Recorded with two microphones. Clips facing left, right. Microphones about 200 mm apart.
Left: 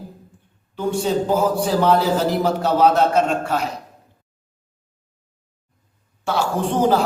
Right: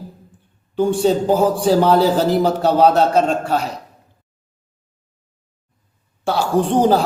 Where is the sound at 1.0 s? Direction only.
30° right (ahead or behind).